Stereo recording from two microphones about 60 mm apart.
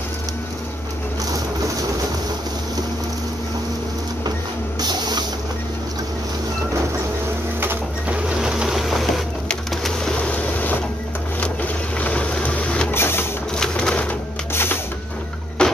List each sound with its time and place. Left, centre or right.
8.4 s sewing machine: centre
10.2 s boat: left
11.4 s a sound: left
12.9 s printer: left
13.6 s bird: centre
14.5 s music: left
15.6 s a sound: centre